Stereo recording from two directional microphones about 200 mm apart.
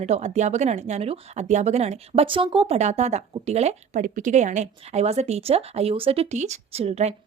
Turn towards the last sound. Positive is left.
turn(degrees=-30)  # may be behind; listen again after turning